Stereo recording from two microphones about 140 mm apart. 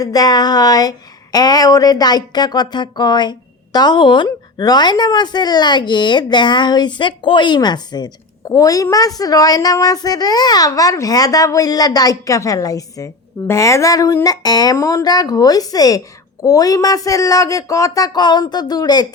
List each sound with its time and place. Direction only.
0.0 s speech: 25° left (ahead or behind)